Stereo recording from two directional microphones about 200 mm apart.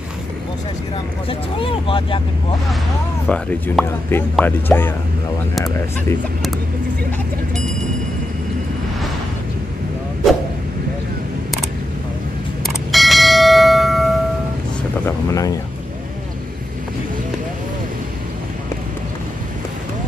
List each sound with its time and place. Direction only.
1.6 s speech: 25° left (ahead or behind)
3.3 s speech: 5° left (ahead or behind)
12.6 s bell: centre (ahead or behind)
15.0 s speech: 15° left (ahead or behind)